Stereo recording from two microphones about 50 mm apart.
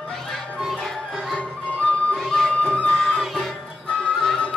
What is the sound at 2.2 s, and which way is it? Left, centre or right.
Music, centre.